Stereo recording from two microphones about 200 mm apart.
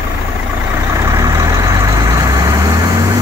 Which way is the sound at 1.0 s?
15° right (ahead or behind).